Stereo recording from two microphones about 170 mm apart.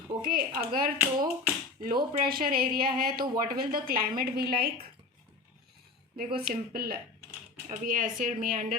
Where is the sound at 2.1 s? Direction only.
60° right (ahead or behind).